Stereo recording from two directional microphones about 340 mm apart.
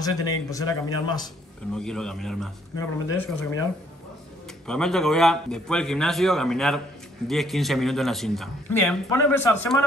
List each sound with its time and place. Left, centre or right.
0.0 s speech: centre
4.6 s speech: centre